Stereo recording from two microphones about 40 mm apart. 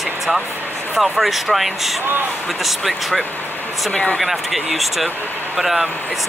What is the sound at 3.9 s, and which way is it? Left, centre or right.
Speech, left.